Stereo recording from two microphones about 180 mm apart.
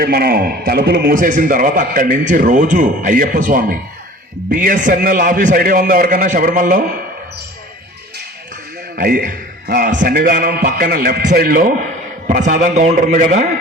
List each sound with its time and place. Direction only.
0.0 s a man's voice: 55° right (ahead or behind)
9.0 s a man's voice: 55° right (ahead or behind)
12.4 s a man's voice: 45° right (ahead or behind)